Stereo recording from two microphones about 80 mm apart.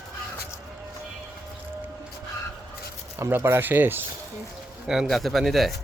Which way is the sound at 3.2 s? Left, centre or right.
Right.